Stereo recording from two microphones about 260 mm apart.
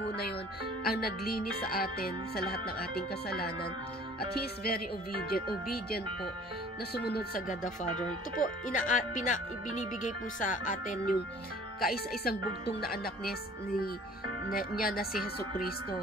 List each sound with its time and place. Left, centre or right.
0.0 s music: left
0.8 s speech: left